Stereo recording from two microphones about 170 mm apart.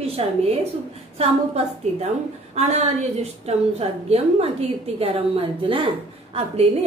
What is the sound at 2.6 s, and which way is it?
A woman's voice, 40° right (ahead or behind).